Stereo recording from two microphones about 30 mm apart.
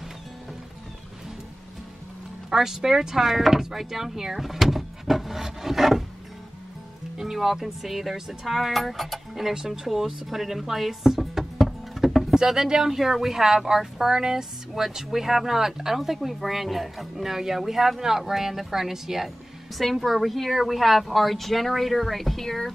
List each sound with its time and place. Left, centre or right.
2.5 s speech: centre
7.2 s speech: centre
9.9 s speech: centre
10.9 s a sound: centre
12.4 s speech: centre
12.9 s speech: centre
19.9 s speech: centre